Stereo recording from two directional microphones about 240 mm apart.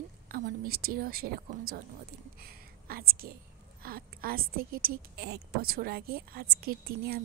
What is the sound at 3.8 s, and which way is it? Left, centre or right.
A woman's voice, right.